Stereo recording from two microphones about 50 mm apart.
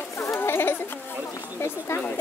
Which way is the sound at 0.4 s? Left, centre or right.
Left.